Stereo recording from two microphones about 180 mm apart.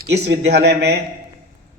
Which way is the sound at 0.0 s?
70° right (ahead or behind).